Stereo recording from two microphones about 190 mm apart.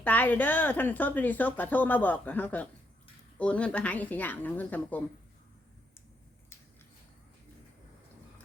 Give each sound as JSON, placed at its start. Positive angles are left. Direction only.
{"t": 0.0, "sound": "a woman's voice", "side_deg": 10}